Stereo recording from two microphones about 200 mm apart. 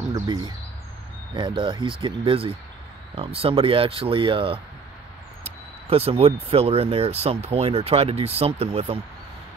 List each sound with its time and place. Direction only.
0.1 s speech: 20° right (ahead or behind)